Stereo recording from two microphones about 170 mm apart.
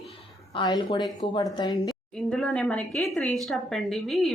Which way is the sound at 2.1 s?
5° left (ahead or behind).